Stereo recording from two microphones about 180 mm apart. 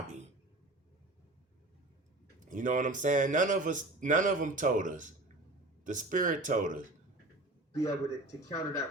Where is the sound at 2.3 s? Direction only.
45° right (ahead or behind).